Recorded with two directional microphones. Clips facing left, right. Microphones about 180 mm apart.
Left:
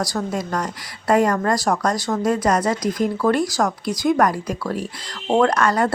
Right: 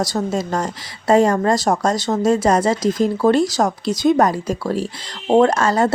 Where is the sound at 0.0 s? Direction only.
25° right (ahead or behind).